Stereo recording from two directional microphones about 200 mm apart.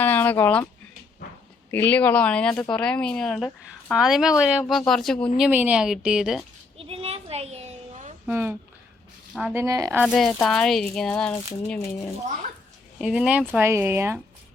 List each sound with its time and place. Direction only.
0.0 s a sound: 10° left (ahead or behind)
1.7 s a woman's voice: 10° left (ahead or behind)
5.5 s a woman's voice: 10° right (ahead or behind)
6.7 s a sound: 30° right (ahead or behind)
8.3 s speech: 10° right (ahead or behind)
10.1 s a woman's voice: centre (ahead or behind)
13.0 s speech: 5° right (ahead or behind)